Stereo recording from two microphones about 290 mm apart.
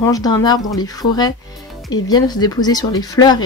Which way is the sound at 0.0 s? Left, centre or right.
Centre.